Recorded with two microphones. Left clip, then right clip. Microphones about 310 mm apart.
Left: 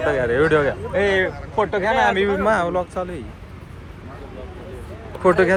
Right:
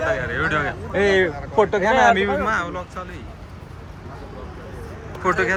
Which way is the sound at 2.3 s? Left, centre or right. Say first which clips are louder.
Left 3 dB; centre.